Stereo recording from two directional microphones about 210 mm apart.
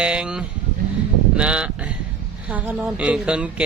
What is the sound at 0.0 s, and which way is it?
A man's voice, 5° right (ahead or behind).